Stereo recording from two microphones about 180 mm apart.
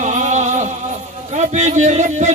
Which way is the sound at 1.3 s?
40° right (ahead or behind).